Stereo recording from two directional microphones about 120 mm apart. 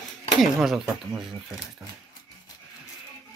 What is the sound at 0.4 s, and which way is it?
Speech, centre (ahead or behind).